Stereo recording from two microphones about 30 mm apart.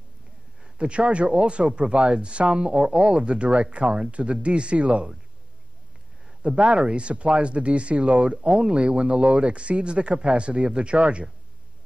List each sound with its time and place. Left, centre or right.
0.7 s speech: right
6.4 s speech: right